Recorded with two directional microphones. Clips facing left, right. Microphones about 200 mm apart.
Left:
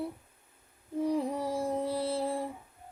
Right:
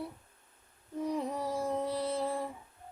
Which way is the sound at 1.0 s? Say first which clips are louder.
Left 3 dB; 30° left (ahead or behind).